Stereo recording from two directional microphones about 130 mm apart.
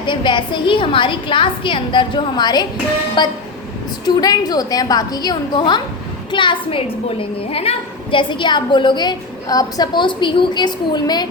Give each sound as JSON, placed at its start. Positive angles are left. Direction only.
{"t": 0.0, "sound": "a woman's voice", "side_deg": 40}